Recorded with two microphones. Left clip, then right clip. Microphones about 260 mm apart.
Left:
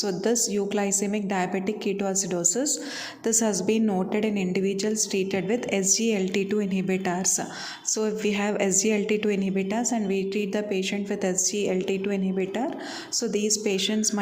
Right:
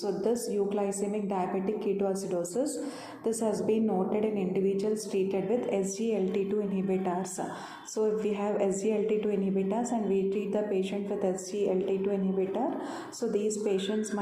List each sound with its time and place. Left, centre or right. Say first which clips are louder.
0.0 s a woman's voice: left 4 dB; left
13.7 s a woman's voice: left 4 dB; left